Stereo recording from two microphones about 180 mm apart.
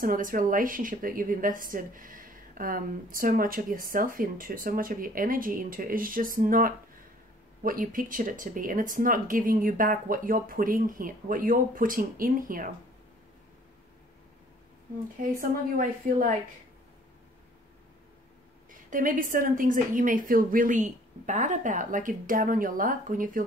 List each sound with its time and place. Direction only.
0.0 s a woman's voice: 50° right (ahead or behind)
15.8 s a woman's voice: 45° right (ahead or behind)
18.9 s a woman's voice: 50° right (ahead or behind)